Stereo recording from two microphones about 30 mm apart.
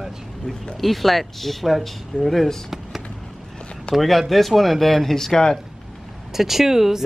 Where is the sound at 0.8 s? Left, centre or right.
Centre.